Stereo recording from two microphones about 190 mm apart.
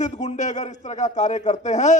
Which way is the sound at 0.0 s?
40° left (ahead or behind).